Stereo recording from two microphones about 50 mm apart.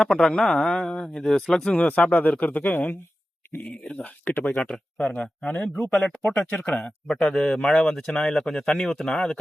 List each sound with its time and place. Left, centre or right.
0.0 s speech: centre
1.7 s speech: left
4.4 s speech: centre
7.3 s speech: centre
7.7 s speech: left
7.9 s speech: centre